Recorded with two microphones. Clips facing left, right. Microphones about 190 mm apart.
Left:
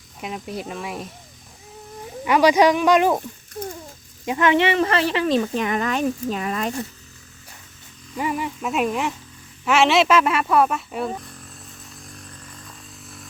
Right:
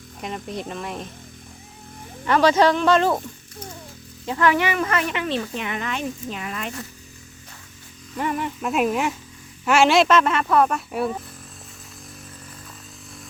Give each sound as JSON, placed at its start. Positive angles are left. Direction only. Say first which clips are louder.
{"t": 0.2, "sound": "speech", "louder": "even", "side_deg": 5}
{"t": 2.2, "sound": "speech", "louder": "left 1 dB", "side_deg": 10}
{"t": 4.3, "sound": "speech", "louder": "left 2 dB", "side_deg": 20}
{"t": 8.1, "sound": "speech", "louder": "even", "side_deg": 5}